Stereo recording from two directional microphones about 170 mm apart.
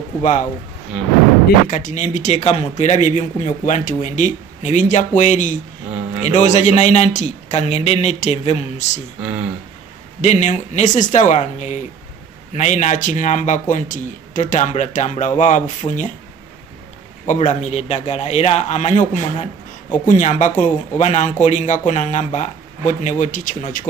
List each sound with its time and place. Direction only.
0.2 s speech: 45° left (ahead or behind)
0.9 s speech: 5° right (ahead or behind)
1.7 s a man's voice: 50° left (ahead or behind)
9.2 s speech: 10° right (ahead or behind)
10.2 s speech: 40° left (ahead or behind)
17.3 s a man's voice: 45° left (ahead or behind)
20.1 s speech: 45° left (ahead or behind)